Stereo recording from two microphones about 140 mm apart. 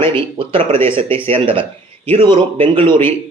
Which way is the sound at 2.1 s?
40° right (ahead or behind).